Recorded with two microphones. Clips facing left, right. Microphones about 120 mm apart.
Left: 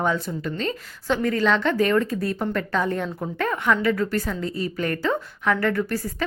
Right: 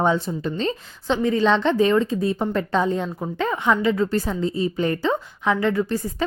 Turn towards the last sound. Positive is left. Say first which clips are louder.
# right 2 dB
turn(degrees=-15)  # may be behind; listen again after turning